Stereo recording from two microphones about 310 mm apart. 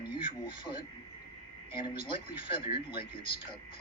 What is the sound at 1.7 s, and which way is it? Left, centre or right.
A man's voice, centre.